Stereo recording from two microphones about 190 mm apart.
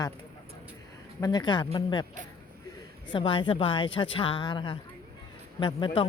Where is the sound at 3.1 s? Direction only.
25° left (ahead or behind).